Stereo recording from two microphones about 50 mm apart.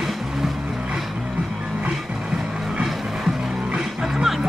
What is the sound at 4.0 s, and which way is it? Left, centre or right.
Music, centre.